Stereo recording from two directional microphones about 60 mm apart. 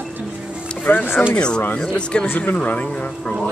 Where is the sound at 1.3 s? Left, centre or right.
Centre.